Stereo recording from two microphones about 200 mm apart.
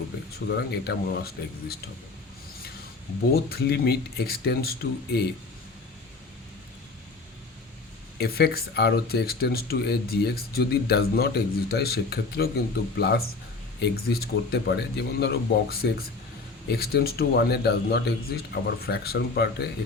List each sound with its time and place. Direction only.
0.4 s speech: 55° left (ahead or behind)
3.3 s speech: 50° left (ahead or behind)
8.2 s speech: 50° left (ahead or behind)